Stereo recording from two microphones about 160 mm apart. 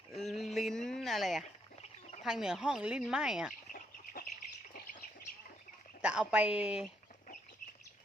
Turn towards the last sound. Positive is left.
turn(degrees=-5)  # may be behind; listen again after turning